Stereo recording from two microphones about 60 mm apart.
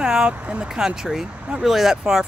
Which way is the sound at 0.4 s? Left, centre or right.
Right.